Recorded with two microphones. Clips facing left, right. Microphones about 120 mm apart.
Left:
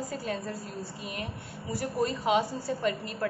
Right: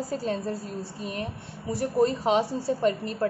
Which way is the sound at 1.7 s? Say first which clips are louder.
Right 6 dB; 30° right (ahead or behind).